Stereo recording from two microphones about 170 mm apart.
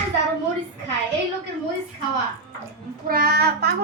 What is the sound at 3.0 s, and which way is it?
Child singing, 60° right (ahead or behind).